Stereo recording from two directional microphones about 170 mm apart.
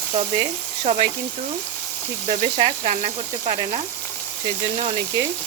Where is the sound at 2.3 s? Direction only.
40° right (ahead or behind).